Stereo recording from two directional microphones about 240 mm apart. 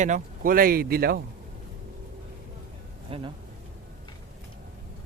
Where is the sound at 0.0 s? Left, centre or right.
Right.